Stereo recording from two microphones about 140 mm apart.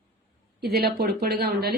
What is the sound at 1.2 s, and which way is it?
Speech, 90° right.